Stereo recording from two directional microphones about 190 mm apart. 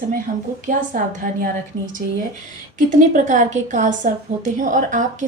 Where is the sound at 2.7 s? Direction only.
40° right (ahead or behind).